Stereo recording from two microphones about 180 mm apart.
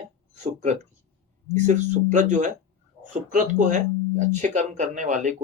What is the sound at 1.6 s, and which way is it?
Speech, 45° right (ahead or behind).